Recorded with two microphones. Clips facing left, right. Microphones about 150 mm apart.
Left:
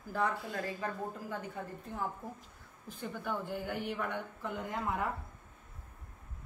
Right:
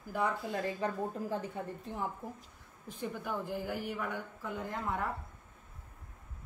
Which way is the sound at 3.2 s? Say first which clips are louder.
Left 1 dB; 5° right (ahead or behind).